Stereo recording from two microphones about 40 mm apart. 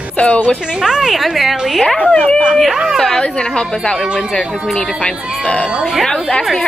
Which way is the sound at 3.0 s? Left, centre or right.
Centre.